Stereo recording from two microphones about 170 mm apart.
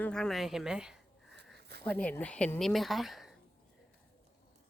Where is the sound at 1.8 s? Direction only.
10° left (ahead or behind).